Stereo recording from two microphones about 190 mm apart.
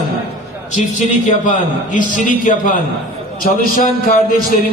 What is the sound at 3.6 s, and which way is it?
Music, 45° left (ahead or behind).